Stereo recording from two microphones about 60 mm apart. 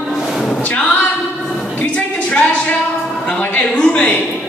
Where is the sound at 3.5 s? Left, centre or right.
Centre.